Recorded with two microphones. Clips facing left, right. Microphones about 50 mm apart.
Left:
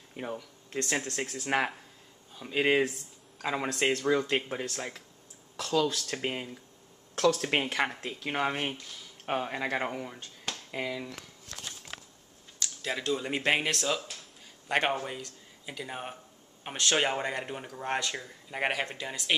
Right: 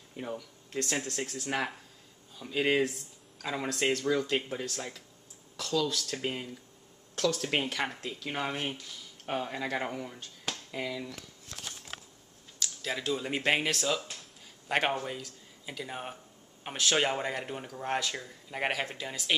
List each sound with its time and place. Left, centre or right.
0.1 s a sound: centre
1.0 s speech: left
12.5 s a man's voice: centre
16.9 s speech: centre